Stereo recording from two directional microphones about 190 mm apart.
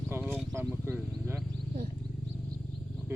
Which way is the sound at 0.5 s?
15° right (ahead or behind).